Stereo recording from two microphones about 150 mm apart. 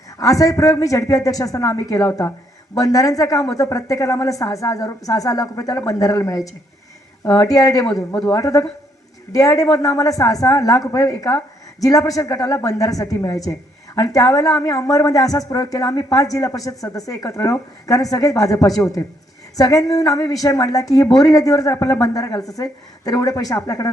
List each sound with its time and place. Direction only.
0.2 s a woman's voice: 20° left (ahead or behind)